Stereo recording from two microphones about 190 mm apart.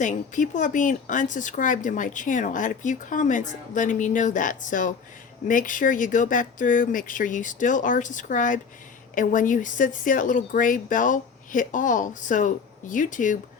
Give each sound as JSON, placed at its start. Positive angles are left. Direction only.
{"t": 0.0, "sound": "speech", "side_deg": 40}